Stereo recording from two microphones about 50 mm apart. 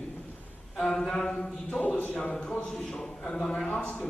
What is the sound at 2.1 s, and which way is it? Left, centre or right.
Speech, centre.